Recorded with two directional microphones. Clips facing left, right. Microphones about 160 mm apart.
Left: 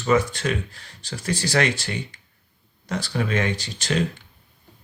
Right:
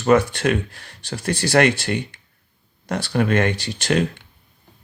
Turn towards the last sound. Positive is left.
turn(degrees=-65)  # may be behind; listen again after turning